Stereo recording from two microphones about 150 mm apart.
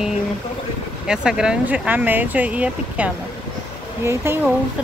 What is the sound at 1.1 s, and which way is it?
Speech, 5° right (ahead or behind).